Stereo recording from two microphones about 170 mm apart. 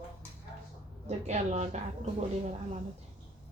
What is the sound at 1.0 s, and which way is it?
A woman's voice, 40° right (ahead or behind).